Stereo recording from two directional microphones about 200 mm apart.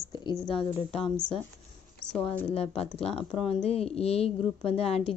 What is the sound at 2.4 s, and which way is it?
A woman's voice, 30° left (ahead or behind).